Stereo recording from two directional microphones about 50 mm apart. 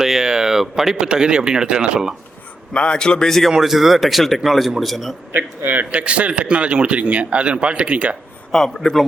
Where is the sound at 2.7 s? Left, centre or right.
Left.